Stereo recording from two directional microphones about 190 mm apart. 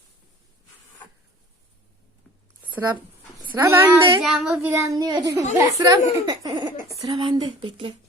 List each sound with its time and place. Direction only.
3.5 s a child's voice: 10° right (ahead or behind)
4.2 s a child's voice: centre (ahead or behind); by 7.9 s 25° right (ahead or behind)